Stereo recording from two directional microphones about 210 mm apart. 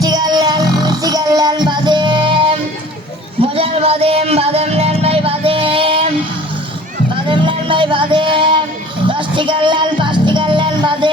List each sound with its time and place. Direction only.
0.0 s music: 20° right (ahead or behind)
7.3 s music: 25° right (ahead or behind)